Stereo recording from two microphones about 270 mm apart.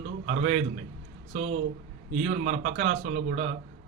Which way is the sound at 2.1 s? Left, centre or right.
Right.